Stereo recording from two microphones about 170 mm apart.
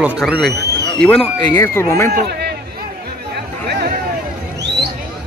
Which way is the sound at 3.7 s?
70° right (ahead or behind).